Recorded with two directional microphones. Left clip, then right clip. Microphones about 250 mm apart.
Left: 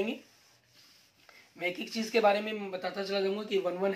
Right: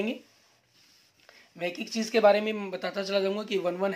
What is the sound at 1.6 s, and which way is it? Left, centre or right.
Speech, right.